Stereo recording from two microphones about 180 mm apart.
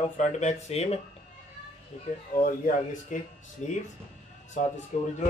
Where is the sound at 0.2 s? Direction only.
40° left (ahead or behind).